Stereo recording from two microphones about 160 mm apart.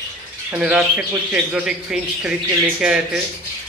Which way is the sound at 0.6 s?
5° right (ahead or behind).